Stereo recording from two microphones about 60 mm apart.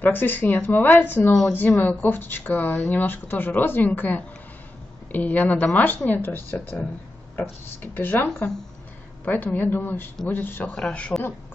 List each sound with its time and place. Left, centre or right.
0.0 s speech: left
10.7 s speech: left